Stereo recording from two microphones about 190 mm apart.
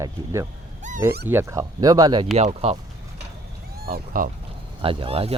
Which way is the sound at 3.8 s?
50° right (ahead or behind).